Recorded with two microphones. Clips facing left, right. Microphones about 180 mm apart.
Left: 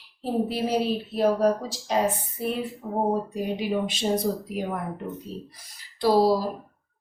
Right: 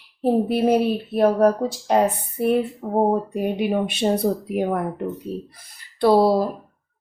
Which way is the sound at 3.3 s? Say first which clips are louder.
Right 5 dB; 60° right (ahead or behind).